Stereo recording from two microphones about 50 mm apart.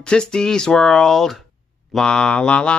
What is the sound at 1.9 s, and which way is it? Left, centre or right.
Speech, centre.